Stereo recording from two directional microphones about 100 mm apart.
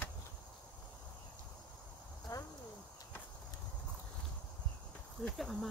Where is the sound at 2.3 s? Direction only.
40° left (ahead or behind).